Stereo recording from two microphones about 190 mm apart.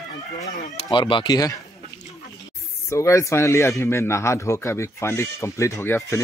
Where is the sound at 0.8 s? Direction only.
25° left (ahead or behind).